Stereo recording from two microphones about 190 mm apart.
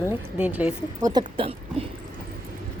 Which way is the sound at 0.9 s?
20° right (ahead or behind).